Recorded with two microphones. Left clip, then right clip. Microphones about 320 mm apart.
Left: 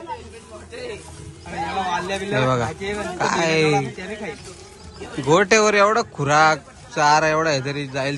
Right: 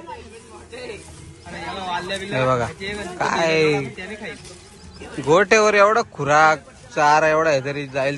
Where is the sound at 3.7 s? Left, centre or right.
Left.